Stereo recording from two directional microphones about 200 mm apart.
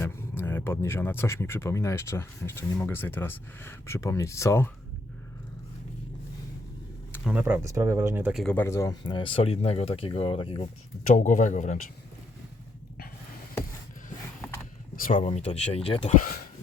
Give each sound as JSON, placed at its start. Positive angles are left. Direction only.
{"t": 0.0, "sound": "speech", "side_deg": 10}
{"t": 7.3, "sound": "speech", "side_deg": -10}
{"t": 8.5, "sound": "speech", "side_deg": 15}
{"t": 11.1, "sound": "speech", "side_deg": 40}
{"t": 14.9, "sound": "speech", "side_deg": 45}
{"t": 15.4, "sound": "speech", "side_deg": 30}
{"t": 16.2, "sound": "a sound", "side_deg": 45}